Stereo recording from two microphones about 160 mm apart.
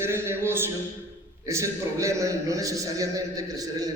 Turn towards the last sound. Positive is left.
turn(degrees=-25)  # may be behind; listen again after turning